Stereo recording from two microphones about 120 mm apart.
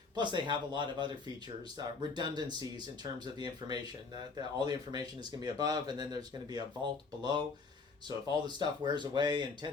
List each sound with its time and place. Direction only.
0.2 s speech: 40° right (ahead or behind)
7.2 s speech: 40° right (ahead or behind)